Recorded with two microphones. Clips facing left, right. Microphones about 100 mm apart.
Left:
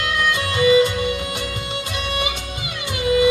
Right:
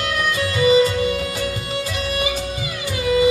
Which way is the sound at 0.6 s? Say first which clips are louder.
Even; 30° right (ahead or behind).